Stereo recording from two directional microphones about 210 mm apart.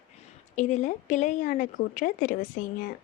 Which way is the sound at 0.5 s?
35° left (ahead or behind).